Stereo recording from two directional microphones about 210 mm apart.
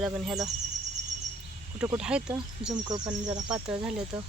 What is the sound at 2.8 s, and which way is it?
Speech, 20° right (ahead or behind).